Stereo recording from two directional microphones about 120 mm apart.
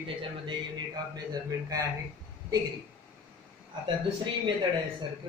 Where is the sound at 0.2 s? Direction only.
40° right (ahead or behind).